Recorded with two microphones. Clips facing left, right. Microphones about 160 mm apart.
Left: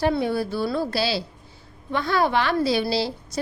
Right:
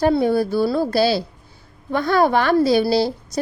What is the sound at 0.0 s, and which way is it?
A woman's voice, 45° right (ahead or behind).